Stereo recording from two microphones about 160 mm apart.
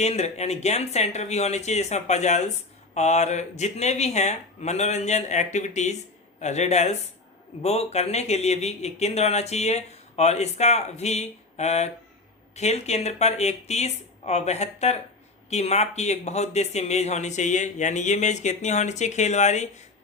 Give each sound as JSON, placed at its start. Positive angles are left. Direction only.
{"t": 0.0, "sound": "speech", "side_deg": 45}